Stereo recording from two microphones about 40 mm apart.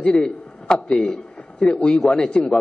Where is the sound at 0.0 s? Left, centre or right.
Left.